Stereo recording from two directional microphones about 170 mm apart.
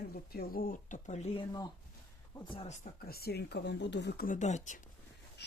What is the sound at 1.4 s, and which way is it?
Speech, 20° left (ahead or behind).